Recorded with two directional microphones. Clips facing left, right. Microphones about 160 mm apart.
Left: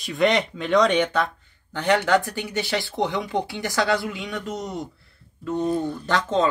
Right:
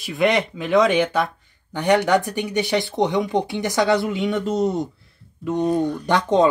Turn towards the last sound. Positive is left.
turn(degrees=-15)  # may be behind; listen again after turning